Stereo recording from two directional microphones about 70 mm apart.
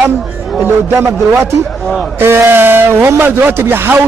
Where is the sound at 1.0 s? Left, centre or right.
Right.